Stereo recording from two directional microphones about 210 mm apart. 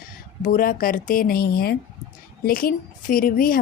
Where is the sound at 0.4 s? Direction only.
40° left (ahead or behind).